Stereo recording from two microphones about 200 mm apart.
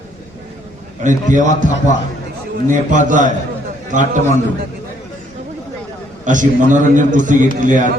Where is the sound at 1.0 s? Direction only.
40° right (ahead or behind).